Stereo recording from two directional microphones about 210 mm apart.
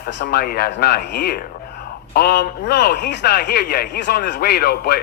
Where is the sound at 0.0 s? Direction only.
50° left (ahead or behind).